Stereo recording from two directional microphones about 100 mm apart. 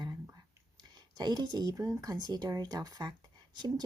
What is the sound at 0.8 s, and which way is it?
Speech, 45° right (ahead or behind).